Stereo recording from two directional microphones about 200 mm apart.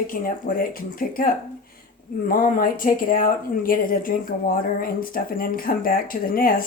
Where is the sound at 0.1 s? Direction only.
45° left (ahead or behind).